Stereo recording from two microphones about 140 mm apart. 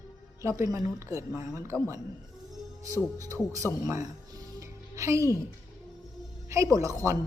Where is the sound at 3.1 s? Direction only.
25° right (ahead or behind).